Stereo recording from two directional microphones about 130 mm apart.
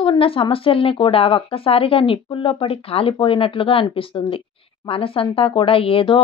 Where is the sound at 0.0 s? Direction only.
45° left (ahead or behind).